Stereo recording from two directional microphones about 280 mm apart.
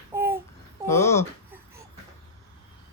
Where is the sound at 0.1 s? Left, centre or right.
Centre.